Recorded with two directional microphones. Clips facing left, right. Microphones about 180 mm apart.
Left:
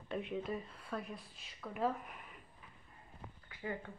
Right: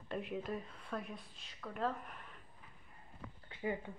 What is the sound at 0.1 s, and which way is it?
Speech, centre (ahead or behind).